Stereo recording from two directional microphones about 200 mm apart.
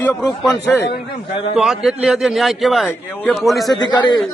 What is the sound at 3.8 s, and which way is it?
Speech, 20° left (ahead or behind).